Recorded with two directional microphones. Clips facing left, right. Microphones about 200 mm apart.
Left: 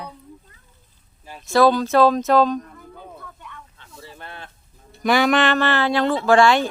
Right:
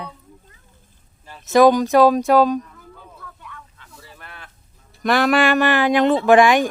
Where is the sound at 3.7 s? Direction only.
25° left (ahead or behind).